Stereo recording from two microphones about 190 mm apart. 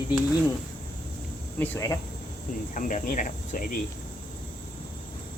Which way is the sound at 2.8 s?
45° left (ahead or behind).